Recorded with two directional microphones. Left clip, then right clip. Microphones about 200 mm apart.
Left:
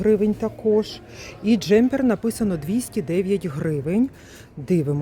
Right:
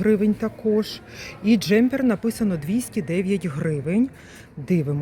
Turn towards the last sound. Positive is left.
turn(degrees=15)  # may be behind; listen again after turning